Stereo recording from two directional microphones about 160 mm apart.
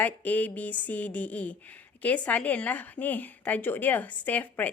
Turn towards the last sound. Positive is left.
turn(degrees=10)  # may be behind; listen again after turning